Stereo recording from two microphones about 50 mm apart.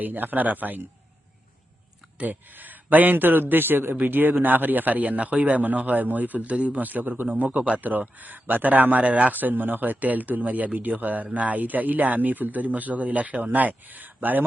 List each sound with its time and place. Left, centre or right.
0.0 s a man's voice: right
2.1 s a man's voice: right